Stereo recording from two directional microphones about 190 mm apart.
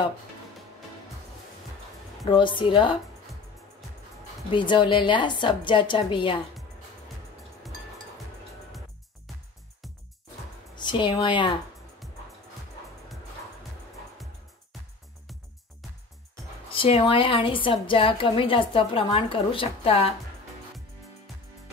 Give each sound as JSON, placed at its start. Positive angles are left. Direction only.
{"t": 2.2, "sound": "a woman's voice", "side_deg": 25}
{"t": 4.5, "sound": "a woman's voice", "side_deg": 25}
{"t": 10.8, "sound": "a woman's voice", "side_deg": 25}
{"t": 16.7, "sound": "a woman's voice", "side_deg": 30}